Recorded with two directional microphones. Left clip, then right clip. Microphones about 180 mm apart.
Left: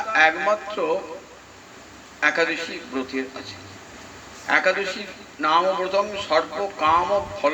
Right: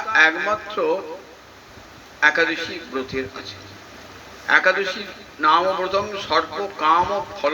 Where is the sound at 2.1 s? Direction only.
40° right (ahead or behind).